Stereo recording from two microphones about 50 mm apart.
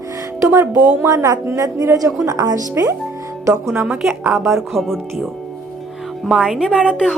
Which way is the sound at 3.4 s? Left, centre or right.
Right.